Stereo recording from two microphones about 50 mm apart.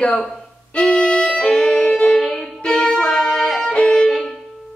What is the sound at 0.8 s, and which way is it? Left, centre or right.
Music, centre.